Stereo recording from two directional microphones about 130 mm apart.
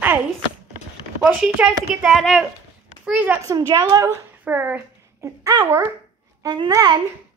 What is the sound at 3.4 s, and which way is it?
Speech, 30° right (ahead or behind).